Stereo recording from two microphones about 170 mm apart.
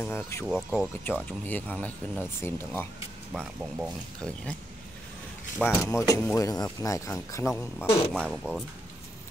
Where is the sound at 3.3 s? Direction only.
5° right (ahead or behind).